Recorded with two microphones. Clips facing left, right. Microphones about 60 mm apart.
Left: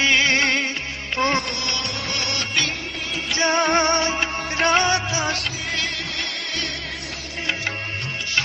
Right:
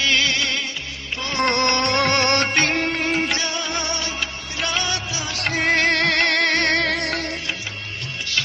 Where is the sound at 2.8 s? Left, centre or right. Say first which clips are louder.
Right 8 dB; right.